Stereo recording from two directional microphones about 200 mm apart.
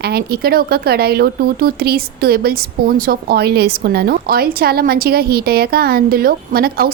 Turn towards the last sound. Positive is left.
turn(degrees=-50)  # may be behind; listen again after turning